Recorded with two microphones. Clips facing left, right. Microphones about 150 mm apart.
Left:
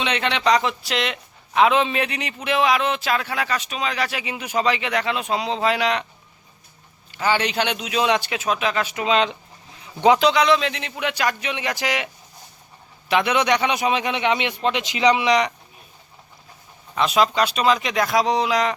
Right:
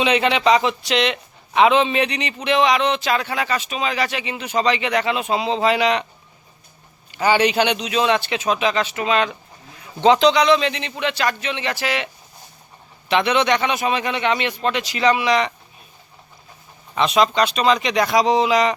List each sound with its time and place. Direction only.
0.0 s speech: 5° right (ahead or behind)
7.1 s a man's voice: 15° right (ahead or behind); by 12.0 s 15° left (ahead or behind)
13.1 s a man's voice: 5° left (ahead or behind)
16.9 s speech: 5° left (ahead or behind)